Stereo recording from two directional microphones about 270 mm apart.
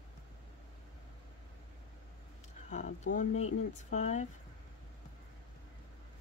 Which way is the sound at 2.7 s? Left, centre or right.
Left.